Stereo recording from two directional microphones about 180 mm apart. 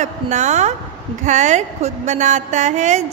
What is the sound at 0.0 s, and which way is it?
A woman's voice, 40° right (ahead or behind).